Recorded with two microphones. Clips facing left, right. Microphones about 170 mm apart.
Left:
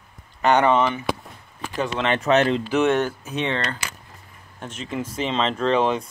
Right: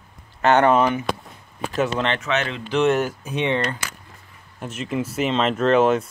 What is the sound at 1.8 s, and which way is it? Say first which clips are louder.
Speech: right 3 dB; centre (ahead or behind).